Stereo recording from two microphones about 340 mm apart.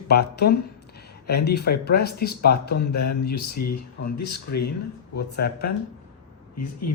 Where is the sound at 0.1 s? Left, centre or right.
Left.